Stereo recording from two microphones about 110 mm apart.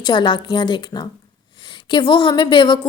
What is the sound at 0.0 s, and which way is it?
A woman's voice, 45° left (ahead or behind).